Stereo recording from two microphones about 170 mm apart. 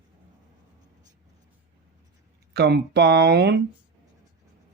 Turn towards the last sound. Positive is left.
turn(degrees=-75)  # may be behind; listen again after turning